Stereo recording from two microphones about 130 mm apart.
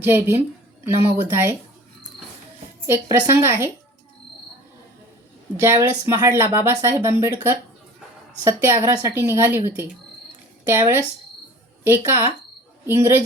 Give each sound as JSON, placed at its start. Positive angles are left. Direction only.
{"t": 0.0, "sound": "a woman's voice", "side_deg": -15}
{"t": 2.8, "sound": "speech", "side_deg": -20}
{"t": 5.5, "sound": "speech", "side_deg": -20}
{"t": 8.4, "sound": "a woman's voice", "side_deg": -20}